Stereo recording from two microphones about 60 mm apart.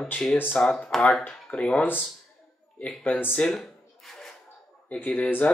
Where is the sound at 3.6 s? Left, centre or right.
Centre.